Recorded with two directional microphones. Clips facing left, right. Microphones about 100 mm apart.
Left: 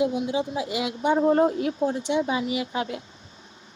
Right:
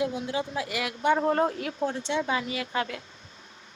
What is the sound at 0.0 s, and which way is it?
A woman's voice, 20° left (ahead or behind).